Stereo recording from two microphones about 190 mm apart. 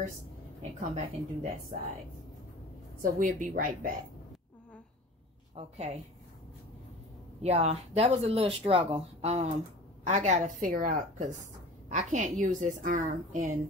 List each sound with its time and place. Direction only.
0.6 s speech: 35° right (ahead or behind)
3.0 s a woman's voice: 45° right (ahead or behind)
5.6 s speech: 35° right (ahead or behind)
7.4 s speech: 35° right (ahead or behind)